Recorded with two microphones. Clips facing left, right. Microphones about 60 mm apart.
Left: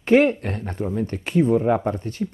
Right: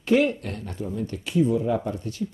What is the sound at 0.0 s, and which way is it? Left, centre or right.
Speech, left.